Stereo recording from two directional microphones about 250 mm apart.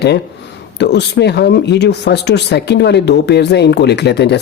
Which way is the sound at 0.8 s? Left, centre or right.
Left.